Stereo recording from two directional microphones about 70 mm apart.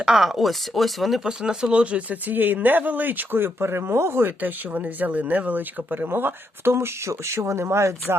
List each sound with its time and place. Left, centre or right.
0.0 s speech: centre; by 7.9 s right